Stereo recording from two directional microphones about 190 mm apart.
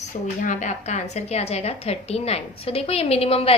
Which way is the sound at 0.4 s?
40° left (ahead or behind).